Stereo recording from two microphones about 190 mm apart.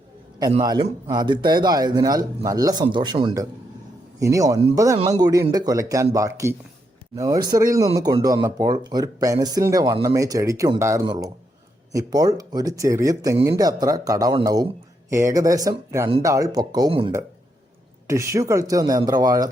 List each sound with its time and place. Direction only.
0.6 s speech: 20° right (ahead or behind)
18.1 s speech: 15° right (ahead or behind)